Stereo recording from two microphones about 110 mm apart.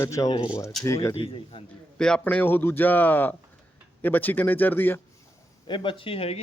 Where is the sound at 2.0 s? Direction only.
5° left (ahead or behind).